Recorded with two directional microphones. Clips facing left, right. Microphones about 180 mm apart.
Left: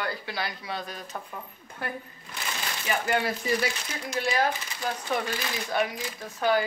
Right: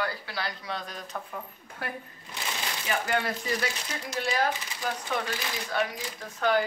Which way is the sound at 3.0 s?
5° left (ahead or behind).